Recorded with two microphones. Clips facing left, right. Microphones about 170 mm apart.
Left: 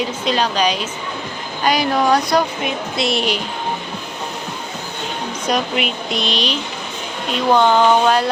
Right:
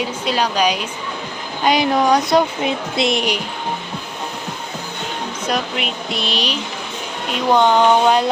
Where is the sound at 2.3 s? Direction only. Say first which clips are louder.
Right 2 dB; 25° right (ahead or behind).